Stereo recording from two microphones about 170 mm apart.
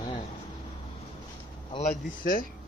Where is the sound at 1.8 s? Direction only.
55° left (ahead or behind).